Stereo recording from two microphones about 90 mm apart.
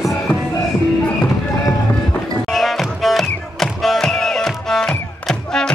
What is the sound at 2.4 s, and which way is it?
Music, centre (ahead or behind).